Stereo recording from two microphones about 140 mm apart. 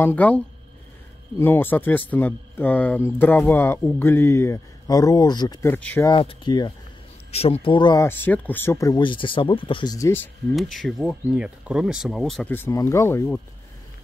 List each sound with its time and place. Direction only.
0.0 s speech: 10° left (ahead or behind)
1.4 s speech: 15° left (ahead or behind)
5.7 s speech: 10° left (ahead or behind)
6.0 s speech: 35° left (ahead or behind)
7.2 s speech: 45° left (ahead or behind)
8.0 s speech: 15° left (ahead or behind)
9.0 s speech: 35° left (ahead or behind)
9.9 s speech: 15° left (ahead or behind)
10.5 s speech: centre (ahead or behind)
12.4 s speech: 15° left (ahead or behind)